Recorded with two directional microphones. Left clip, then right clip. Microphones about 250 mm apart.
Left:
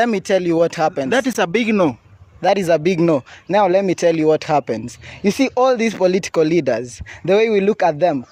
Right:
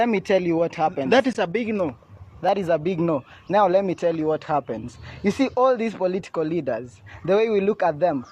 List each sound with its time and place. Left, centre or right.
0.0 s a man's voice: left